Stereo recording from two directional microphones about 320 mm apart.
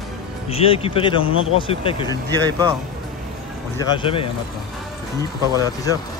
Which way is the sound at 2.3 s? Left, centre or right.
Centre.